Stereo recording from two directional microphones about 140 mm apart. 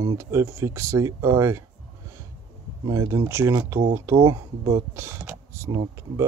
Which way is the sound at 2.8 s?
20° right (ahead or behind).